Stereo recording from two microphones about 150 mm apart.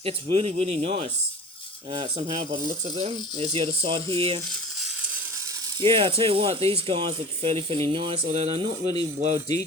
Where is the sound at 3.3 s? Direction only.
40° right (ahead or behind).